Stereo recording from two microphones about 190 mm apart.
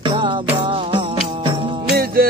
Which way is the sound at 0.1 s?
25° right (ahead or behind).